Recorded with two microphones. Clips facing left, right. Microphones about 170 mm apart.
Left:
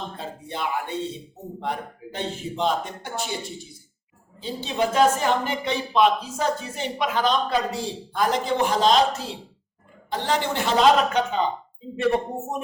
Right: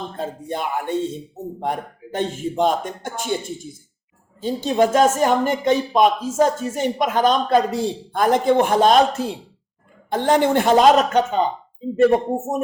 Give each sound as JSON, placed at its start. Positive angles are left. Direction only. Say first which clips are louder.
{"t": 0.2, "sound": "a woman's voice", "louder": "right 7 dB", "side_deg": -45}